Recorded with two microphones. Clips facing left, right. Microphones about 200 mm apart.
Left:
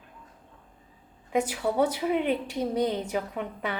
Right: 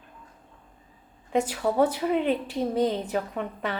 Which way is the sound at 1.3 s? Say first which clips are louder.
Right 1 dB; 10° left (ahead or behind).